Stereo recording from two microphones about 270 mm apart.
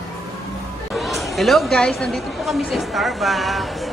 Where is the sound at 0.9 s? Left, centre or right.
Centre.